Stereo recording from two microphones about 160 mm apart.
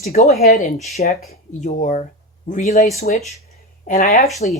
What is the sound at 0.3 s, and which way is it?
Speech, 45° left (ahead or behind).